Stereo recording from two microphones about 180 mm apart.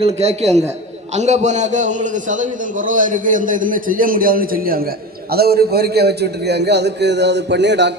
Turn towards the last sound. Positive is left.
turn(degrees=-75)  # may be behind; listen again after turning